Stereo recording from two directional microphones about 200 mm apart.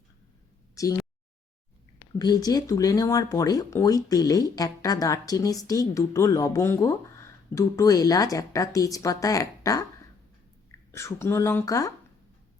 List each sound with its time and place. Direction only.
0.8 s speech: 15° left (ahead or behind)
2.1 s speech: 20° left (ahead or behind)
10.9 s speech: 15° left (ahead or behind)